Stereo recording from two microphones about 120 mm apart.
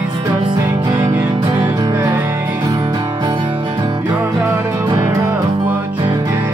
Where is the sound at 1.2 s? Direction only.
40° right (ahead or behind).